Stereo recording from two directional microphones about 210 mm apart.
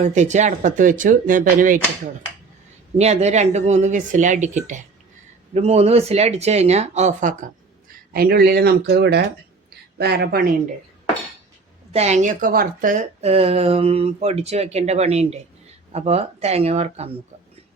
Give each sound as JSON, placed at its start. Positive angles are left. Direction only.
{"t": 0.0, "sound": "a woman's voice", "side_deg": -35}
{"t": 3.0, "sound": "a woman's voice", "side_deg": -30}
{"t": 11.9, "sound": "a woman's voice", "side_deg": -30}